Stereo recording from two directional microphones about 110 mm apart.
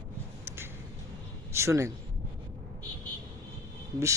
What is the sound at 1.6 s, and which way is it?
Speech, 25° right (ahead or behind).